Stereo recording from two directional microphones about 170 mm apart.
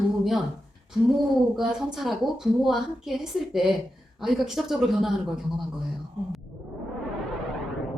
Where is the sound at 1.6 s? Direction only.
Centre (ahead or behind).